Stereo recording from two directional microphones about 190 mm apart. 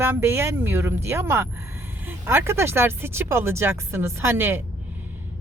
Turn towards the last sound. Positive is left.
turn(degrees=-10)  # may be behind; listen again after turning